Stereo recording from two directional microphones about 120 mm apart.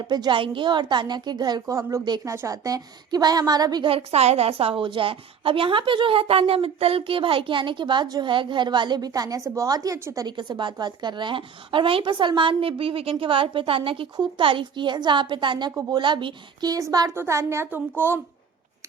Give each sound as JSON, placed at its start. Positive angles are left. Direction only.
{"t": 0.0, "sound": "a woman's voice", "side_deg": -40}
{"t": 2.0, "sound": "a woman's voice", "side_deg": -35}
{"t": 2.3, "sound": "a woman's voice", "side_deg": -25}
{"t": 3.8, "sound": "a woman's voice", "side_deg": -55}
{"t": 10.2, "sound": "a woman's voice", "side_deg": -40}
{"t": 17.2, "sound": "a woman's voice", "side_deg": -25}